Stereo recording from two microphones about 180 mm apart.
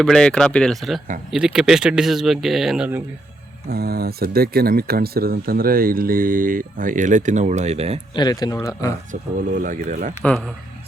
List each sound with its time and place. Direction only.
0.0 s speech: 5° left (ahead or behind)
3.7 s speech: 60° right (ahead or behind); by 7.9 s 35° right (ahead or behind)
8.1 s speech: 25° left (ahead or behind)
9.6 s speech: 45° right (ahead or behind)
10.2 s speech: 5° left (ahead or behind)